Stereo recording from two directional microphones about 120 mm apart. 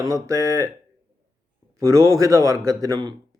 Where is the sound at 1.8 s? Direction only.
25° right (ahead or behind).